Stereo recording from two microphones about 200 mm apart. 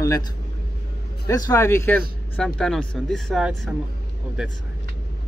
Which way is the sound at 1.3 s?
15° left (ahead or behind).